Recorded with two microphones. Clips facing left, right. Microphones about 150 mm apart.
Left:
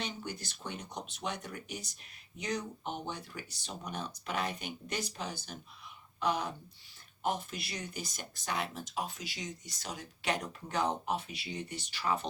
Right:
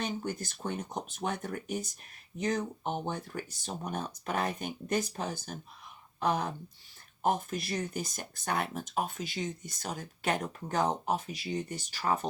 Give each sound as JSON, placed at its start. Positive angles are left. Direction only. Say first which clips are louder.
{"t": 0.0, "sound": "speech", "louder": "right 6 dB", "side_deg": -45}